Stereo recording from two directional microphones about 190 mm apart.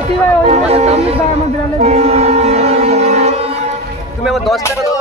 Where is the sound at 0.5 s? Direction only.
35° right (ahead or behind).